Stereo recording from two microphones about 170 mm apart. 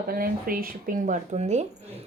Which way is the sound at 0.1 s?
60° right (ahead or behind).